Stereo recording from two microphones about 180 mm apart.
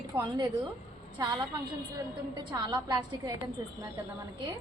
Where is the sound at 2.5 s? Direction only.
20° right (ahead or behind).